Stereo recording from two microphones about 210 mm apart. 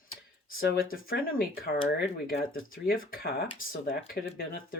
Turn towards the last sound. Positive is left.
turn(degrees=45)  # may be behind; listen again after turning